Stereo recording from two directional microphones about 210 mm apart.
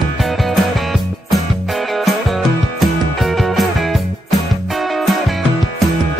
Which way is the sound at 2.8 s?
Centre (ahead or behind).